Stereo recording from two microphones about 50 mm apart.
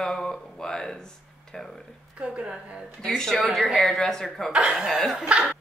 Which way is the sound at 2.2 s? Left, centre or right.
Right.